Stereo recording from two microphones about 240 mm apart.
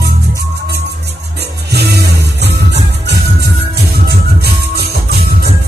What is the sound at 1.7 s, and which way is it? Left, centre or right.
Music, right.